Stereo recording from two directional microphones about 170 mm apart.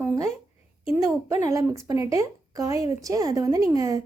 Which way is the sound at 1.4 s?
20° right (ahead or behind).